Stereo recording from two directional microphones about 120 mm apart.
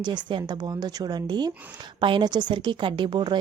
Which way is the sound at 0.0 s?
40° right (ahead or behind).